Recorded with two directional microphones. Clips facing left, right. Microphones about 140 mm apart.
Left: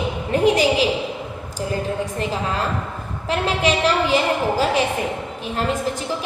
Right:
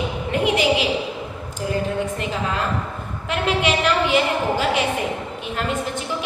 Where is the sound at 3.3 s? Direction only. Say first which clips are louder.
Left 1 dB; 35° left (ahead or behind).